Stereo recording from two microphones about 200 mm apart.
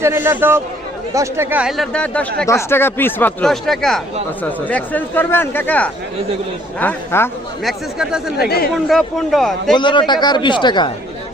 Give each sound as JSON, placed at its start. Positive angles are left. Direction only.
{"t": 0.0, "sound": "a man's voice", "side_deg": -10}
{"t": 7.6, "sound": "speech", "side_deg": 0}
{"t": 8.4, "sound": "speech", "side_deg": 50}
{"t": 8.7, "sound": "speech", "side_deg": 0}
{"t": 9.7, "sound": "speech", "side_deg": 25}